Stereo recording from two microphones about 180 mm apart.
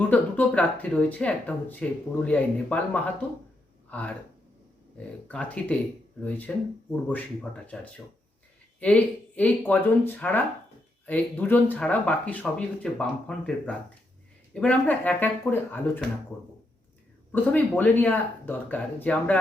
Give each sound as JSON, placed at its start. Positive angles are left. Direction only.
{"t": 0.1, "sound": "speech", "side_deg": 10}
{"t": 5.3, "sound": "speech", "side_deg": 5}
{"t": 17.3, "sound": "speech", "side_deg": 10}